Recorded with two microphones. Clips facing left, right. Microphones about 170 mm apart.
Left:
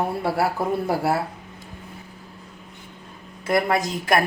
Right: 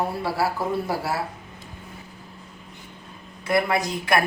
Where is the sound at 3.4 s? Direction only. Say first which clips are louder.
Left 1 dB; 45° left (ahead or behind).